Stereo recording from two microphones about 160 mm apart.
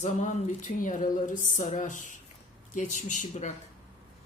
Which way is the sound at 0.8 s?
55° left (ahead or behind).